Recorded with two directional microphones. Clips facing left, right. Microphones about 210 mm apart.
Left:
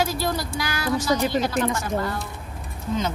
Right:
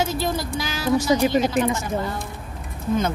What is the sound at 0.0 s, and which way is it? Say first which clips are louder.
A woman's voice: right 1 dB; 20° right (ahead or behind).